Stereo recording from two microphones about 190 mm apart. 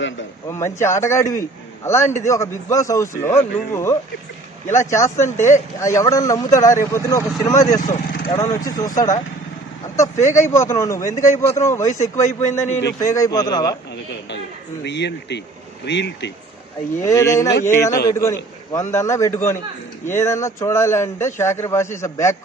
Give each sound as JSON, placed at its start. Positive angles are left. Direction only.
{"t": 0.4, "sound": "a man's voice", "side_deg": 15}
{"t": 7.9, "sound": "vehicle", "side_deg": 45}
{"t": 8.3, "sound": "a man's voice", "side_deg": 15}
{"t": 10.0, "sound": "a man's voice", "side_deg": 15}
{"t": 14.8, "sound": "speech", "side_deg": 65}
{"t": 17.0, "sound": "a man's voice", "side_deg": 15}